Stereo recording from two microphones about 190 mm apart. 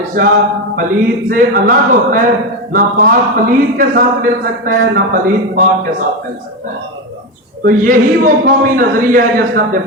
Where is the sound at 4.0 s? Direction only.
50° right (ahead or behind).